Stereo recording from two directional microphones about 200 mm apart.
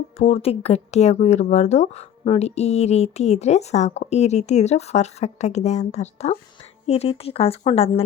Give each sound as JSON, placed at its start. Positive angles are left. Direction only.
{"t": 0.2, "sound": "speech", "side_deg": 30}